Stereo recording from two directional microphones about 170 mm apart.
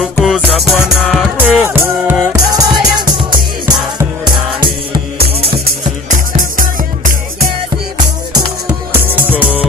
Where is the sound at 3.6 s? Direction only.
25° right (ahead or behind).